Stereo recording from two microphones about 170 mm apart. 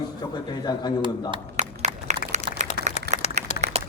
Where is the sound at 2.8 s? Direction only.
60° left (ahead or behind).